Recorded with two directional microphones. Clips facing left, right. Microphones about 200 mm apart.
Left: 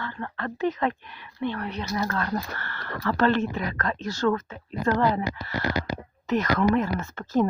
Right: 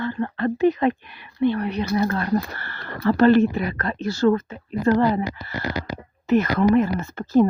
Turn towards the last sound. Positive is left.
turn(degrees=-15)  # may be behind; listen again after turning